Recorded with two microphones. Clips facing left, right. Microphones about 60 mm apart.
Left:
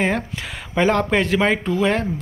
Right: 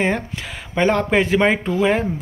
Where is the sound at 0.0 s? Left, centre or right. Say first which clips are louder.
Right 1 dB; centre.